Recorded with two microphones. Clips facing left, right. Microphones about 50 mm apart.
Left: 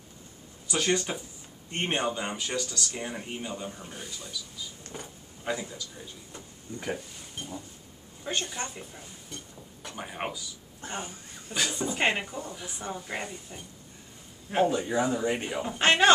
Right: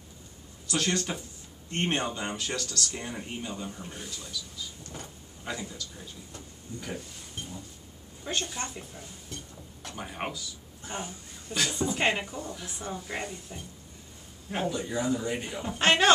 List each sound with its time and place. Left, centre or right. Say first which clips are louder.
0.7 s speech: left 2 dB; centre
4.9 s a sound: left 1 dB; centre
7.3 s speech: left 2 dB; centre
14.7 s speech: left 2 dB; left
15.6 s speech: left 1 dB; centre